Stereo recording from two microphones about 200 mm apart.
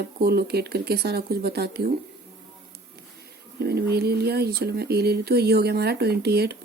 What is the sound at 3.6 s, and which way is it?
A woman's voice, 55° right (ahead or behind).